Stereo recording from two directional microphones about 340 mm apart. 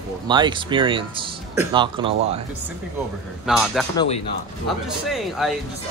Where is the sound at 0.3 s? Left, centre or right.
Centre.